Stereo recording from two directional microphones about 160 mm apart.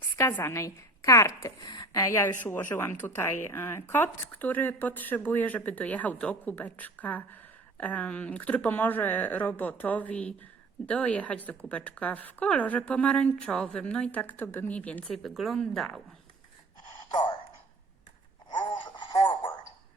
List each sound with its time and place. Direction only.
0.2 s a woman's voice: 15° left (ahead or behind)
17.1 s a sound: 30° left (ahead or behind)
18.5 s radio: 30° left (ahead or behind)